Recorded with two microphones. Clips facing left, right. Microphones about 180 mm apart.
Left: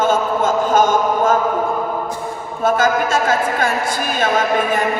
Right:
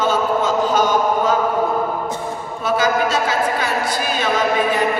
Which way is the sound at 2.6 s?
50° left (ahead or behind).